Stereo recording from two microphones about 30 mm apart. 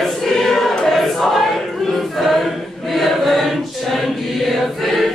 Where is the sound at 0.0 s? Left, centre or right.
Centre.